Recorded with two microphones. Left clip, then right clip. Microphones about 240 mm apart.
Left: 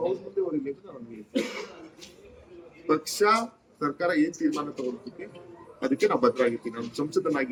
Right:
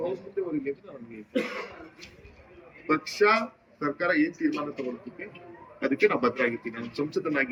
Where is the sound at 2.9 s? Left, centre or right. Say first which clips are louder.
Even; centre.